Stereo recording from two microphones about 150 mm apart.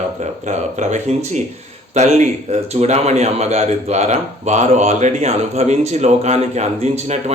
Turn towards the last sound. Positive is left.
turn(degrees=-45)  # may be behind; listen again after turning